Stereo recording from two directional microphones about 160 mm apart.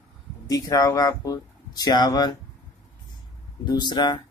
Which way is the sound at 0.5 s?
25° left (ahead or behind).